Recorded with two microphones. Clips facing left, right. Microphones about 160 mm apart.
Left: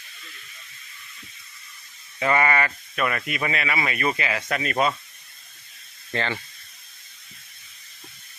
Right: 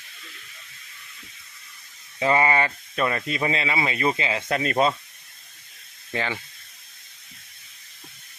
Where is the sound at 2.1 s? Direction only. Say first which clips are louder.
Right 1 dB; 25° right (ahead or behind).